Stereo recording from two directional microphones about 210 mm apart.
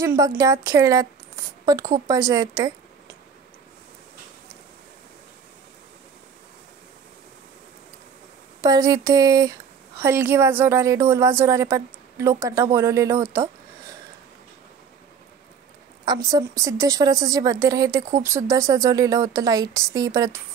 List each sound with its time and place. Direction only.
0.0 s a woman's voice: 15° right (ahead or behind)
8.5 s a woman's voice: 15° right (ahead or behind)
16.1 s a woman's voice: 15° right (ahead or behind)